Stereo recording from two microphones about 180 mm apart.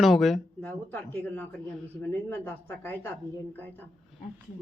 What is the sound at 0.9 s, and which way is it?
Speech, 10° left (ahead or behind).